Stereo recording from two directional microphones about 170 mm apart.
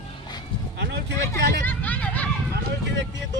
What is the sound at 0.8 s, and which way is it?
Vehicle, 85° right.